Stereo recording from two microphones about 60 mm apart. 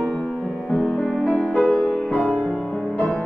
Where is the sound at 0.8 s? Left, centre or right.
Centre.